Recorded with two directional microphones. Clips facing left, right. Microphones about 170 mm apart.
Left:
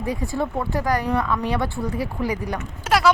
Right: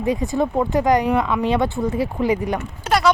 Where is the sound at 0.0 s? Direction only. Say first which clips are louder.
Right 5 dB; 20° right (ahead or behind).